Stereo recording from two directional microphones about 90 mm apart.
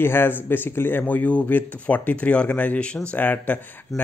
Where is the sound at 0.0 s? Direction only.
25° left (ahead or behind).